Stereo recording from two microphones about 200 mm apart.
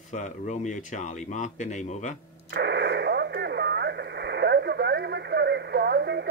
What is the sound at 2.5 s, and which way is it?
Radio, 55° right (ahead or behind).